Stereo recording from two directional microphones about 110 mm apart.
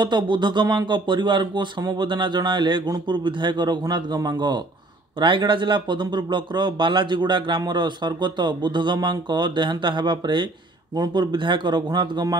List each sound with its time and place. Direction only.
0.0 s speech: 45° right (ahead or behind)